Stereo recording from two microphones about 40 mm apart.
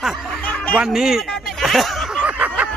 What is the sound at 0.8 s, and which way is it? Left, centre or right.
Speech, centre.